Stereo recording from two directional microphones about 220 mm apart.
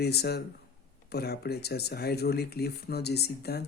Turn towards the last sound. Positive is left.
turn(degrees=45)  # may be behind; listen again after turning